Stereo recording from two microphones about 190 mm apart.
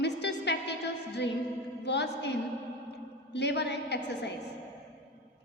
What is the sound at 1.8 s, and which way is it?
Speech, 65° left (ahead or behind).